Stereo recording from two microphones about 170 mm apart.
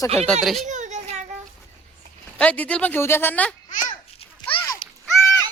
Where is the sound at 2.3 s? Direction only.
10° left (ahead or behind).